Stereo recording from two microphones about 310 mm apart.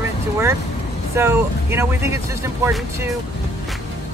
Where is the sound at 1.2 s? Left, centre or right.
Centre.